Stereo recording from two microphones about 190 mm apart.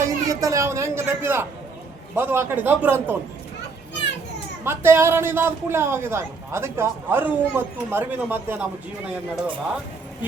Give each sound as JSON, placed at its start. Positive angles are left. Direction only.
{"t": 0.0, "sound": "a man's voice", "side_deg": -15}
{"t": 4.6, "sound": "a man's voice", "side_deg": -10}